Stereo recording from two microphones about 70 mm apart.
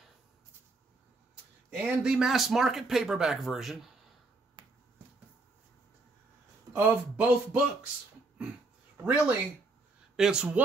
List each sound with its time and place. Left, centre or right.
1.8 s speech: centre
6.7 s speech: centre
9.0 s speech: centre